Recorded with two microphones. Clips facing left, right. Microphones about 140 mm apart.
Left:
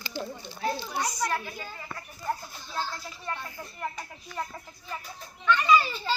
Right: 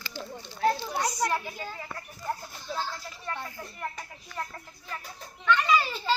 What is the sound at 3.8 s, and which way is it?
Speech, 10° left (ahead or behind).